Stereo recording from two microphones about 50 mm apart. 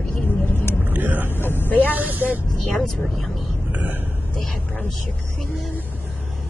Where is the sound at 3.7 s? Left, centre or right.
Right.